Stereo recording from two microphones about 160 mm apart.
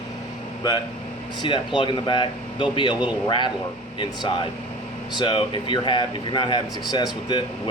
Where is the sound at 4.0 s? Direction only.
30° left (ahead or behind).